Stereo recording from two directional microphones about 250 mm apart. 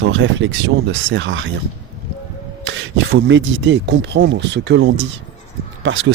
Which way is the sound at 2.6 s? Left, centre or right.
Right.